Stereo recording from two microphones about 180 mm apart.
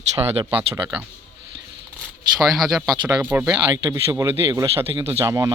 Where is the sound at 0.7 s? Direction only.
15° right (ahead or behind).